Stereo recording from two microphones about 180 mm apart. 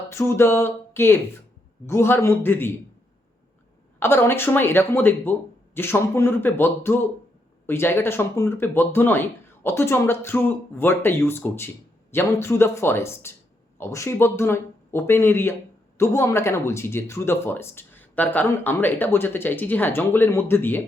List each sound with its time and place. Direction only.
0.1 s speech: 15° left (ahead or behind)
4.0 s speech: 15° left (ahead or behind)